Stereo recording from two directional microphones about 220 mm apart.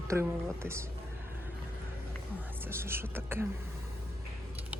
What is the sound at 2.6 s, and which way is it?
Speech, 10° right (ahead or behind).